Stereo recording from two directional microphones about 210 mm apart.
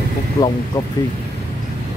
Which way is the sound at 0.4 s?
15° left (ahead or behind).